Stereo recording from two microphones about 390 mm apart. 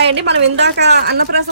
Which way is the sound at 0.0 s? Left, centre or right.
Right.